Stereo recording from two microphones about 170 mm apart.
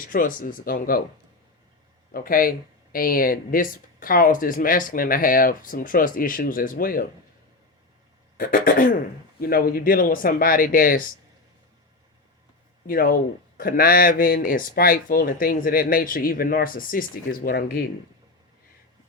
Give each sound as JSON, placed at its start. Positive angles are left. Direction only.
{"t": 0.0, "sound": "speech", "side_deg": 55}
{"t": 2.1, "sound": "speech", "side_deg": 60}
{"t": 8.4, "sound": "speech", "side_deg": 55}
{"t": 12.9, "sound": "speech", "side_deg": 60}